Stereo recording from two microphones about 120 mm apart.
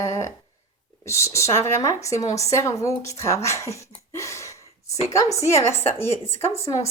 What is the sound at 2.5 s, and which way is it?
Speech, 25° left (ahead or behind).